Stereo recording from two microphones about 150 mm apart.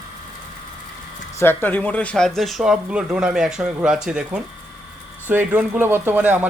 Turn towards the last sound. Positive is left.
turn(degrees=-10)  # may be behind; listen again after turning